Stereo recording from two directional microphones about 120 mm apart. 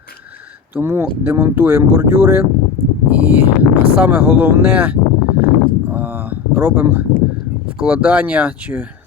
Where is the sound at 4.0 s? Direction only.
15° right (ahead or behind).